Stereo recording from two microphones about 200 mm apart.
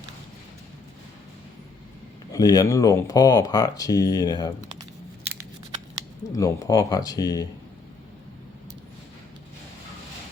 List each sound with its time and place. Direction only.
2.3 s speech: 20° left (ahead or behind)
6.2 s speech: 15° left (ahead or behind)